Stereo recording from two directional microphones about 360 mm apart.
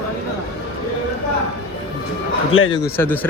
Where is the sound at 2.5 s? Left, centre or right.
Left.